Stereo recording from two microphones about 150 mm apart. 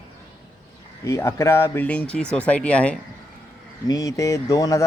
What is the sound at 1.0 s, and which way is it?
Speech, 20° left (ahead or behind).